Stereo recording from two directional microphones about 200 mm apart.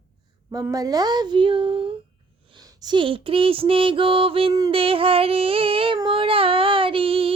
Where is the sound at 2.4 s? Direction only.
20° right (ahead or behind).